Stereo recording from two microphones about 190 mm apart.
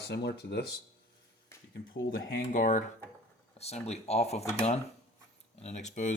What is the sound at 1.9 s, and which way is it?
Speech, 45° left (ahead or behind).